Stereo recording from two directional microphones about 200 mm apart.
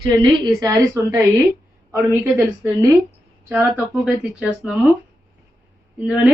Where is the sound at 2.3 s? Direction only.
15° right (ahead or behind).